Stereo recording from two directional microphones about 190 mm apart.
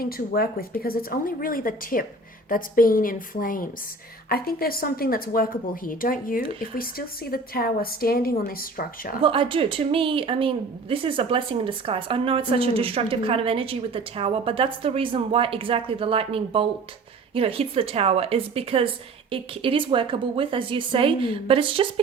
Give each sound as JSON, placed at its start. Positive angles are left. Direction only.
{"t": 0.8, "sound": "a woman's voice", "side_deg": 50}
{"t": 9.2, "sound": "a woman's voice", "side_deg": -25}